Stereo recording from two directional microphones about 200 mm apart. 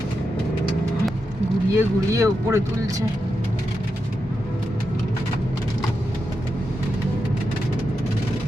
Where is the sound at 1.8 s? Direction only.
15° right (ahead or behind).